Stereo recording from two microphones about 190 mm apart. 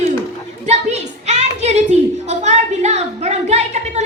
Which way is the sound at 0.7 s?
35° right (ahead or behind).